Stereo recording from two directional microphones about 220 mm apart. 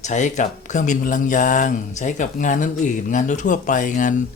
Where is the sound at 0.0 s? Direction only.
35° left (ahead or behind).